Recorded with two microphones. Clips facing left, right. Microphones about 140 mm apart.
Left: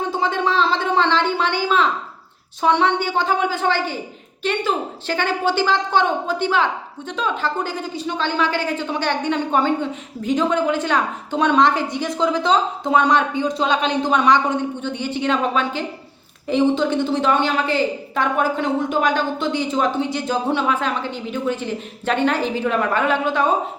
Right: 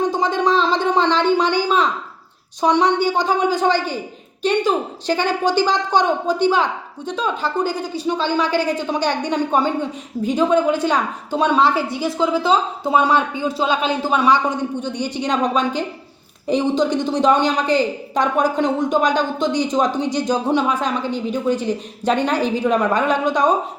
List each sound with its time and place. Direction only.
0.1 s a woman's voice: 15° right (ahead or behind)